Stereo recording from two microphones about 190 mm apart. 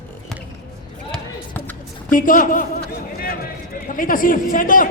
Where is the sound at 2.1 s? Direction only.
45° left (ahead or behind).